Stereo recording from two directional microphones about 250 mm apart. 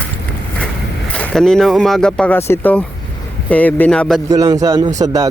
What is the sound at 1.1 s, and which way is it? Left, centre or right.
Speech, centre.